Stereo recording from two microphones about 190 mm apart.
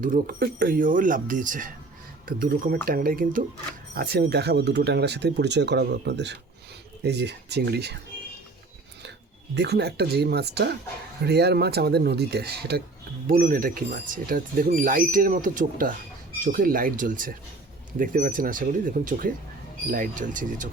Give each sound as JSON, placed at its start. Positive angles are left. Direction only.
{"t": 0.0, "sound": "speech", "side_deg": -45}
{"t": 9.6, "sound": "speech", "side_deg": -60}